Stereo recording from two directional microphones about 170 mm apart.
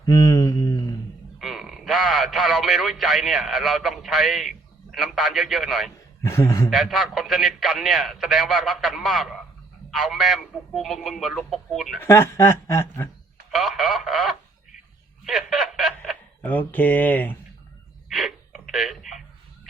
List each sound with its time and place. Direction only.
0.0 s mantra: 20° left (ahead or behind)
1.4 s a man's voice: centre (ahead or behind)
6.2 s speech: 15° left (ahead or behind)
6.7 s a man's voice: centre (ahead or behind)
11.9 s speech: 15° left (ahead or behind)
13.5 s speech: centre (ahead or behind)
15.2 s snicker: centre (ahead or behind)
16.0 s speech: 10° left (ahead or behind)
18.1 s a sound: centre (ahead or behind)